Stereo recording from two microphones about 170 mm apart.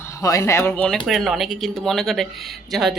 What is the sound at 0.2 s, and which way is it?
Speech, 20° left (ahead or behind).